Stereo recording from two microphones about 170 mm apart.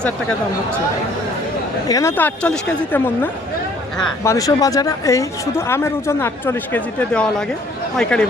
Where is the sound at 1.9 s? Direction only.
15° left (ahead or behind).